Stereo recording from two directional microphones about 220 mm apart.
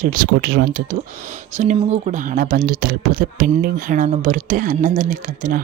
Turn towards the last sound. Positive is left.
turn(degrees=-40)  # may be behind; listen again after turning